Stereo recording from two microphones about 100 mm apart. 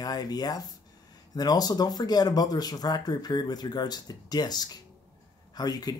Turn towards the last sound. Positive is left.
turn(degrees=40)  # may be behind; listen again after turning